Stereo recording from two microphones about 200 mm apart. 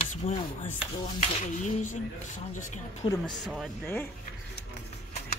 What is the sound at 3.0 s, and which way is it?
Speech, 25° left (ahead or behind).